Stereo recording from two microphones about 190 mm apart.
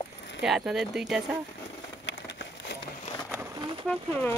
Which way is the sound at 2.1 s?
70° left (ahead or behind).